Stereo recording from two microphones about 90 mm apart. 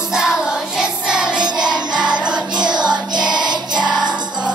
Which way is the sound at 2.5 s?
55° right (ahead or behind).